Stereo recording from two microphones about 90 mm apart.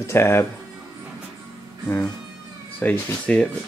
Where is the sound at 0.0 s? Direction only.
30° left (ahead or behind).